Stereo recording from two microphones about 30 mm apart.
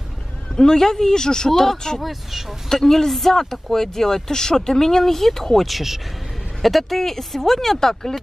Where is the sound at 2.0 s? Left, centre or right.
Centre.